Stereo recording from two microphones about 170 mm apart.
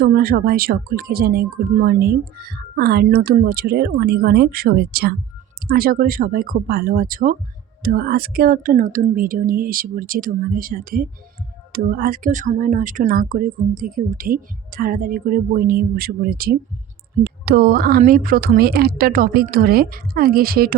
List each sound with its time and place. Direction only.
0.0 s speech: 60° right (ahead or behind)